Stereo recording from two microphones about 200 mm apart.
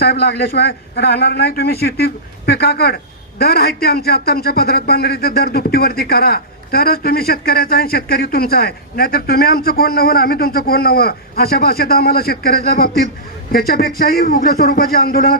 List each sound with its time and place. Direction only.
0.0 s a man's voice: 55° left (ahead or behind)